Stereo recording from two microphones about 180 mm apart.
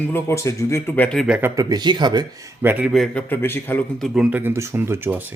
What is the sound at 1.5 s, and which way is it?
Speech, 20° right (ahead or behind).